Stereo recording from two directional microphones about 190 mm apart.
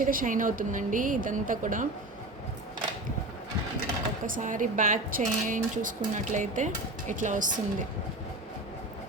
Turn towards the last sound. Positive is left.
turn(degrees=-45)  # may be behind; listen again after turning